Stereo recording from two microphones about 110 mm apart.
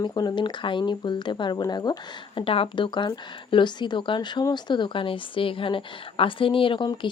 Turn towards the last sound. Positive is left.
turn(degrees=45)  # may be behind; listen again after turning